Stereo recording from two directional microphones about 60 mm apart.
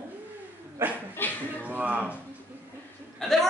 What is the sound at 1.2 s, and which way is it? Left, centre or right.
Speech, left.